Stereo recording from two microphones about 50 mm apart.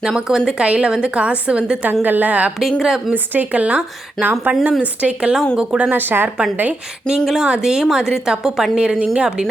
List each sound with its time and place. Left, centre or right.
0.1 s a woman's voice: centre
1.9 s speech: right
2.6 s a woman's voice: centre
3.1 s a woman's voice: right
7.1 s speech: centre
7.4 s a woman's voice: centre